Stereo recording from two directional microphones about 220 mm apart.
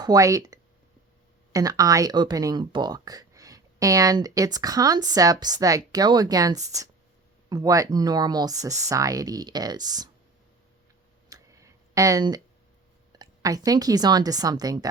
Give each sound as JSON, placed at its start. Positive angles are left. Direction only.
{"t": 0.0, "sound": "speech", "side_deg": -15}
{"t": 11.3, "sound": "a sound", "side_deg": -15}
{"t": 13.1, "sound": "a woman's voice", "side_deg": -15}